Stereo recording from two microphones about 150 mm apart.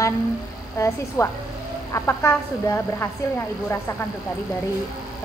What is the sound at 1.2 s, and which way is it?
A woman's voice, 20° left (ahead or behind).